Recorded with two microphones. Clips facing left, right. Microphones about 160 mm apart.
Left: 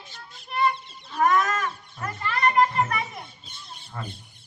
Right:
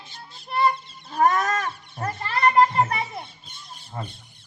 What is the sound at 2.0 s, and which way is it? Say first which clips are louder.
Children playing: right 3 dB; 35° right (ahead or behind).